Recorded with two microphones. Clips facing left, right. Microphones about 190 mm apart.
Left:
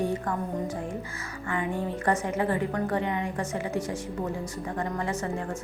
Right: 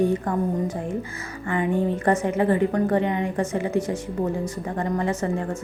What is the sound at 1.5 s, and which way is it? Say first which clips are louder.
A woman's voice: right 7 dB; 25° right (ahead or behind).